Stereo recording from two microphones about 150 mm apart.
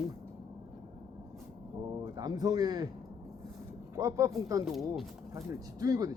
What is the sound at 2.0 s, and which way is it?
Speech, 25° right (ahead or behind).